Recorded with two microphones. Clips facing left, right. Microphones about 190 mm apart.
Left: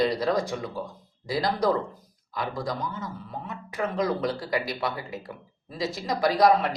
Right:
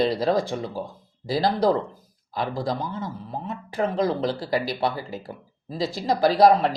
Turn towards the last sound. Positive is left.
turn(degrees=-30)  # may be behind; listen again after turning